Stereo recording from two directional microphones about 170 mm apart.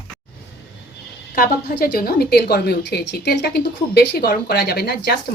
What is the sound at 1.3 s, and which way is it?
A woman's voice, 55° left (ahead or behind).